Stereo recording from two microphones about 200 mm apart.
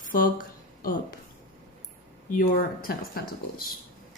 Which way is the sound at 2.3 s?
45° left (ahead or behind).